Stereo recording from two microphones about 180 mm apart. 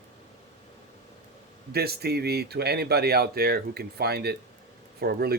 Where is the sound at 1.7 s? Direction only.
60° right (ahead or behind).